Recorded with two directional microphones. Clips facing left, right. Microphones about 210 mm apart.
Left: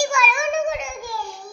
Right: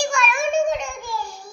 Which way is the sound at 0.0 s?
5° left (ahead or behind).